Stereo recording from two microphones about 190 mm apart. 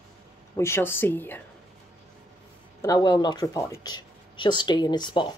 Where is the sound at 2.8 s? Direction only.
20° left (ahead or behind).